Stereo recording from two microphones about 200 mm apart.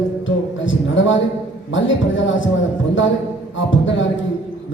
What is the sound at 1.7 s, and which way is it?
Speech, 70° left (ahead or behind).